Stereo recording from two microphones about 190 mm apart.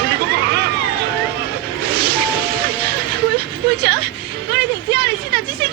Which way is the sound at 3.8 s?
60° right (ahead or behind).